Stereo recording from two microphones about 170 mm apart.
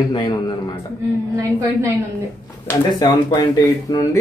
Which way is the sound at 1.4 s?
20° right (ahead or behind).